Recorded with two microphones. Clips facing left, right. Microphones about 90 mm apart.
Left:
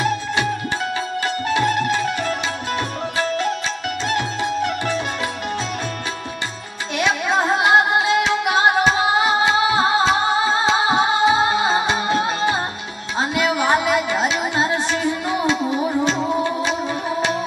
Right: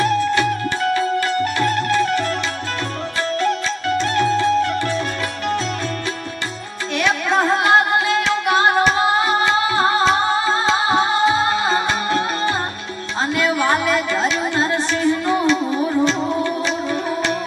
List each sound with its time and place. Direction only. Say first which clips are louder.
0.0 s music: right 4 dB; 20° left (ahead or behind)
4.0 s music: right 5 dB; 20° left (ahead or behind)
7.0 s music: right 1 dB; 20° left (ahead or behind)